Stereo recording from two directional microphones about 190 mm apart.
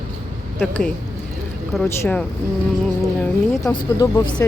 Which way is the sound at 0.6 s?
5° left (ahead or behind).